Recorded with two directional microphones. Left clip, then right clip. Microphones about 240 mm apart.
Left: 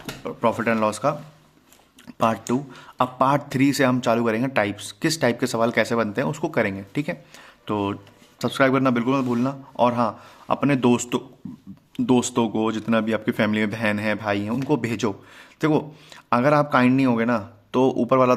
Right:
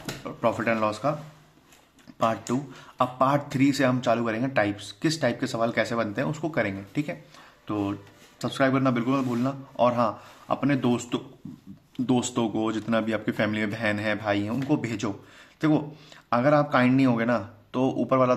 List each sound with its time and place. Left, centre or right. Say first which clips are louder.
0.2 s speech: left 4 dB; left
2.1 s speech: left 4 dB; left